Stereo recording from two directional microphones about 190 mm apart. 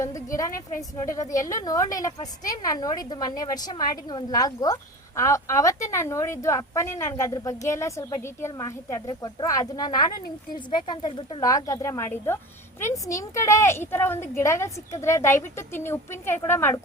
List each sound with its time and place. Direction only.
0.0 s a woman's voice: 15° left (ahead or behind)